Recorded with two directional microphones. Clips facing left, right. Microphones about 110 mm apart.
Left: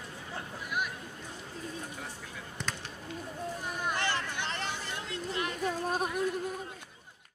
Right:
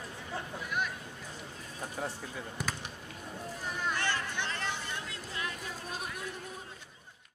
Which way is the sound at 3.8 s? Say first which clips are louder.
Left 1 dB; 20° left (ahead or behind).